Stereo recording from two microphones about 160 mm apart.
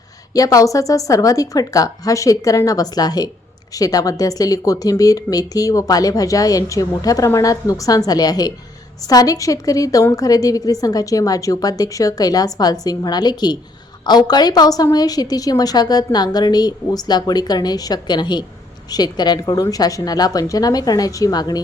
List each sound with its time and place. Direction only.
0.3 s speech: 20° left (ahead or behind)